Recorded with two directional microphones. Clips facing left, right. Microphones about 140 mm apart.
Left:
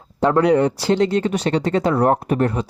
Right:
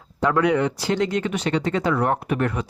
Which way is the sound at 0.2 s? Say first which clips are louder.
Left 4 dB; 30° left (ahead or behind).